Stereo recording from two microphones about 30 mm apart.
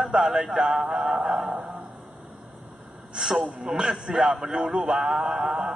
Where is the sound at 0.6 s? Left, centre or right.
Right.